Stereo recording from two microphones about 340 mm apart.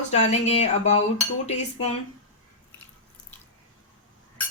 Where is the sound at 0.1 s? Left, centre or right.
Centre.